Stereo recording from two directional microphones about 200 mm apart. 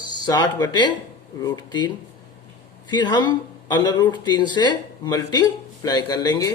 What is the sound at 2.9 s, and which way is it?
Speech, 20° left (ahead or behind).